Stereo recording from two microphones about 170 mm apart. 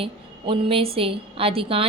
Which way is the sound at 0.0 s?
30° right (ahead or behind).